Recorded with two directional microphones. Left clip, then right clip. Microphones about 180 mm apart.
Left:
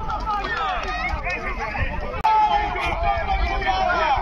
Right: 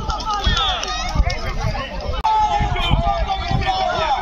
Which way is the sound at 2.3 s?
30° right (ahead or behind).